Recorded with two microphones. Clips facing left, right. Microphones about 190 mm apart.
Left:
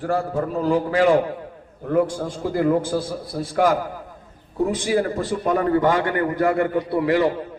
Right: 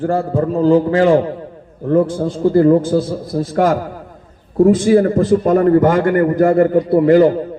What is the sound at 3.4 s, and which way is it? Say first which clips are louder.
Speech: right 4 dB; 50° right (ahead or behind).